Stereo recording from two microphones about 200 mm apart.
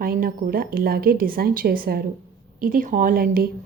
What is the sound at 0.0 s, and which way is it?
Speech, 45° right (ahead or behind).